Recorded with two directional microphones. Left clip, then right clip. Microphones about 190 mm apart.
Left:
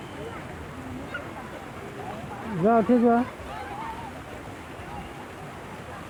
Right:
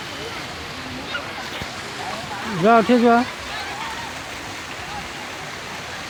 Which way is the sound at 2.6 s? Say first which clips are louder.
Right 6 dB; 25° right (ahead or behind).